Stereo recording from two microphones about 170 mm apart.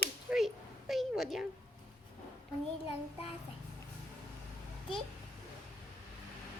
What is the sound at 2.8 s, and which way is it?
Child singing, 35° left (ahead or behind).